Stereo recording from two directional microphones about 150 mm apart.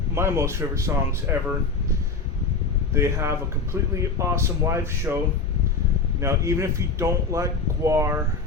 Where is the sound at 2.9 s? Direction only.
15° right (ahead or behind).